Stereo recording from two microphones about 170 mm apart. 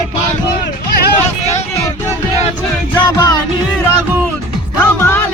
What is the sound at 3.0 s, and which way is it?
Music, 25° left (ahead or behind).